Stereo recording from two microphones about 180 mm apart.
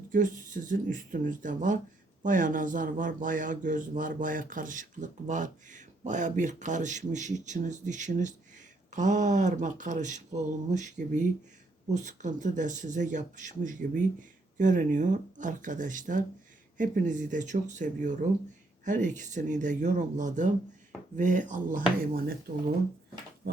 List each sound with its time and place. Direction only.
0.1 s a man's voice: 45° right (ahead or behind)
11.9 s a man's voice: 45° right (ahead or behind)